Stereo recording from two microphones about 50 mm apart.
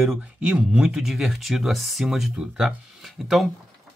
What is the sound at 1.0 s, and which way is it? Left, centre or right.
Speech, centre.